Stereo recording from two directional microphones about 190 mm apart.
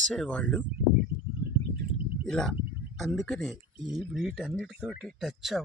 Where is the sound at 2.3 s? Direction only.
5° left (ahead or behind).